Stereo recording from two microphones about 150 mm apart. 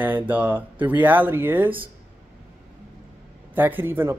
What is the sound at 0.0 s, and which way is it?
Speech, 10° right (ahead or behind).